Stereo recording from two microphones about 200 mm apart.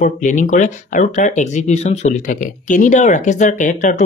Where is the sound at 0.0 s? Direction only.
40° left (ahead or behind).